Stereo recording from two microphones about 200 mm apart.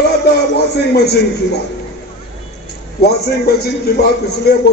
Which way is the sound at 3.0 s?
55° left (ahead or behind).